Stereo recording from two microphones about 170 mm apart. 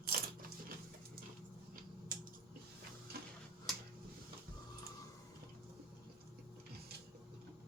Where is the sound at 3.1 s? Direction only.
65° right (ahead or behind).